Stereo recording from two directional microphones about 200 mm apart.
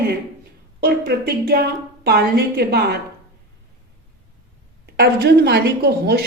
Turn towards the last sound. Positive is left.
turn(degrees=-55)  # may be behind; listen again after turning